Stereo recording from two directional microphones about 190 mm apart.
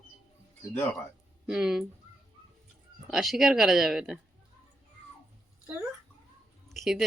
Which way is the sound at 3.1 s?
Centre (ahead or behind).